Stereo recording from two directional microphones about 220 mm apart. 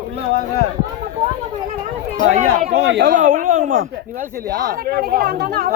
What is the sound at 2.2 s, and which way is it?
Speech, 30° right (ahead or behind).